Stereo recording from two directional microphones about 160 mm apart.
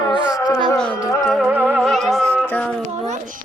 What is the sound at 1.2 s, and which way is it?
Speech, centre (ahead or behind).